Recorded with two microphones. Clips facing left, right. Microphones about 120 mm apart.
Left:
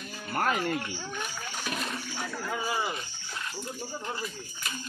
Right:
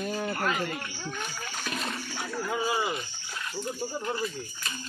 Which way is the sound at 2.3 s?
10° right (ahead or behind).